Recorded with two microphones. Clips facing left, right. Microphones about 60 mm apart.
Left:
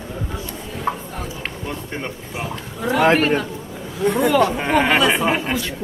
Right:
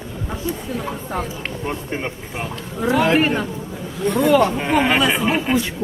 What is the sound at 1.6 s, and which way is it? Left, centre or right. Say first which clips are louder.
Speech: right 4 dB; right.